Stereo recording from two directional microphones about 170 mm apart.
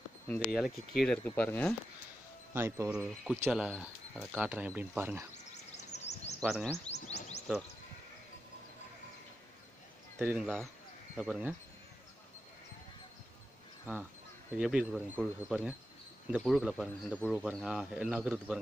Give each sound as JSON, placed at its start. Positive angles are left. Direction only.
{"t": 0.5, "sound": "speech", "side_deg": 0}
{"t": 2.5, "sound": "speech", "side_deg": -15}
{"t": 5.3, "sound": "a sound", "side_deg": 40}
{"t": 6.4, "sound": "speech", "side_deg": 0}
{"t": 6.9, "sound": "music", "side_deg": 40}
{"t": 10.1, "sound": "speech", "side_deg": -10}
{"t": 13.9, "sound": "speech", "side_deg": -10}
{"t": 16.3, "sound": "speech", "side_deg": -5}
{"t": 17.4, "sound": "speech", "side_deg": -5}